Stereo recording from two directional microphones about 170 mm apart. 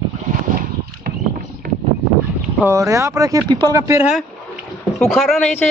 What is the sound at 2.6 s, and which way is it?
Speech, 15° right (ahead or behind).